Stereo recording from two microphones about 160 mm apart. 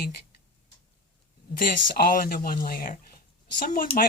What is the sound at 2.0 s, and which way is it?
Speech, 65° left (ahead or behind).